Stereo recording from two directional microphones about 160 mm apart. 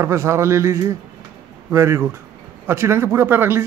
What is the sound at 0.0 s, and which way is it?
A man's voice, 15° right (ahead or behind).